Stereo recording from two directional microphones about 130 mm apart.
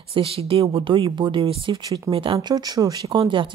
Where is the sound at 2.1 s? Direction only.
40° right (ahead or behind).